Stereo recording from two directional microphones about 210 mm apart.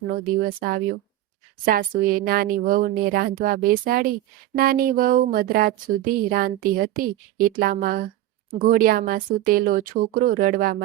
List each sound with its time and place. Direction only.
0.1 s speech: 45° right (ahead or behind)